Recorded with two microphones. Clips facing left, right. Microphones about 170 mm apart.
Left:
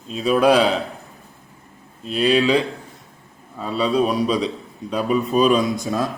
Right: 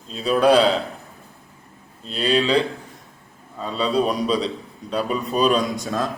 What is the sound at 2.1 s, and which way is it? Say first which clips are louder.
Speech: left 4 dB; 30° right (ahead or behind).